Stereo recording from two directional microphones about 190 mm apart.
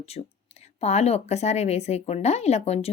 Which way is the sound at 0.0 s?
35° left (ahead or behind).